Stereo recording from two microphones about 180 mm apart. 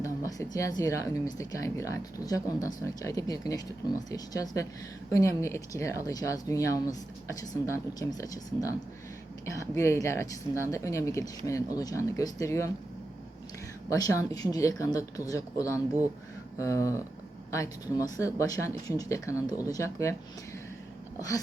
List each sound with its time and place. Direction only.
0.0 s speech: 20° left (ahead or behind)
13.9 s speech: 20° left (ahead or behind)
21.2 s speech: 20° left (ahead or behind)